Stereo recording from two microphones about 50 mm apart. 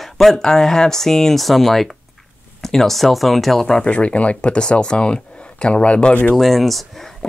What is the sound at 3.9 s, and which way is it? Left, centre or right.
Speech, left.